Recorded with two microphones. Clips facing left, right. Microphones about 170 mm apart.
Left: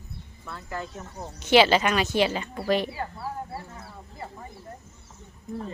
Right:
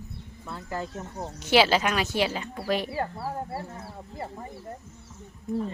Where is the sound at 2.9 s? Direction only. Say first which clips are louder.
Right 3 dB; 40° right (ahead or behind).